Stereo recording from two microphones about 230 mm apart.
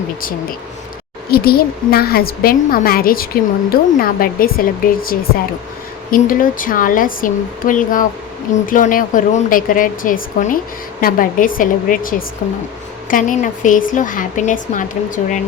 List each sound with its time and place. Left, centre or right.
1.3 s a woman's voice: left